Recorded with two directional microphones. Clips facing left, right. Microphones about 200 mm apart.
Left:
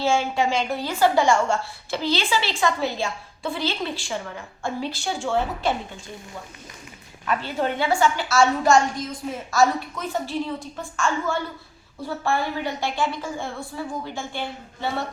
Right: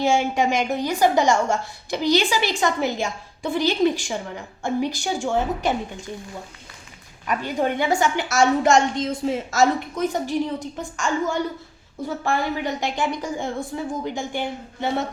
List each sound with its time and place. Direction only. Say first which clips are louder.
0.0 s a woman's voice: right 2 dB; 15° right (ahead or behind)
7.3 s a woman's voice: right 2 dB; 15° right (ahead or behind)